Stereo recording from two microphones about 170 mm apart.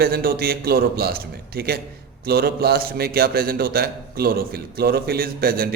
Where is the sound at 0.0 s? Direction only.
60° right (ahead or behind).